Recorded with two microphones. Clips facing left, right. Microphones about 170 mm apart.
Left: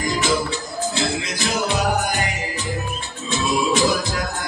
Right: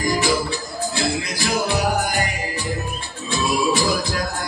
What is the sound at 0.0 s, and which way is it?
Music, 20° left (ahead or behind).